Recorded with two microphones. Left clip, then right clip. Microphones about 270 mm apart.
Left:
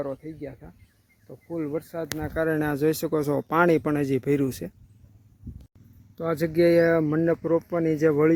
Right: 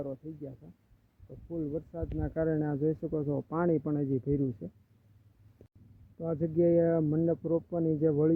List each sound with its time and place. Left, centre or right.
0.0 s speech: centre
6.1 s speech: centre